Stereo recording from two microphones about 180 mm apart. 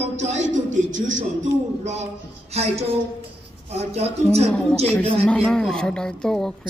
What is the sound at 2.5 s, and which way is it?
A man's voice, 35° right (ahead or behind).